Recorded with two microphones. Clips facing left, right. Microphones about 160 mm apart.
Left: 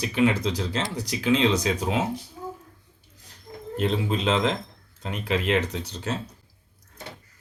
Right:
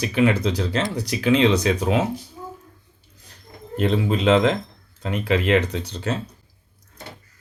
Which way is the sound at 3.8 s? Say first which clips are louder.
Right 4 dB; 65° right (ahead or behind).